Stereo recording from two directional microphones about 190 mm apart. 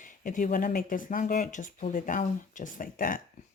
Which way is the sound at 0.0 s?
45° left (ahead or behind).